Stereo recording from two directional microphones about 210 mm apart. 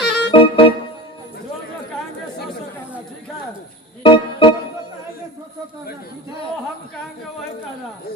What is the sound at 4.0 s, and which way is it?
Music, 25° left (ahead or behind).